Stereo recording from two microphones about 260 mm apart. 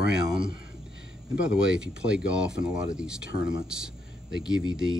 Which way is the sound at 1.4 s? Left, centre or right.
Centre.